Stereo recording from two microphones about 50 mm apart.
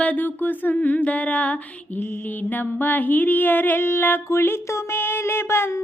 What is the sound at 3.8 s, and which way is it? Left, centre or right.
Music, left.